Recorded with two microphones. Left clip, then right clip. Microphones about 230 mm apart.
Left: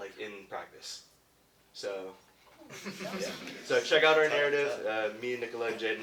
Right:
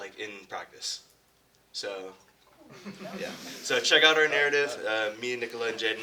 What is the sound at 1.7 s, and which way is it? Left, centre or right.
Speech, right.